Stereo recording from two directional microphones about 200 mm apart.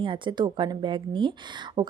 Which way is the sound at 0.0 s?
25° right (ahead or behind).